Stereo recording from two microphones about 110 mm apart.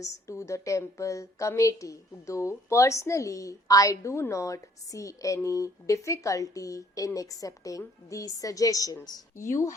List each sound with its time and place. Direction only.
0.0 s a woman's voice: 30° left (ahead or behind)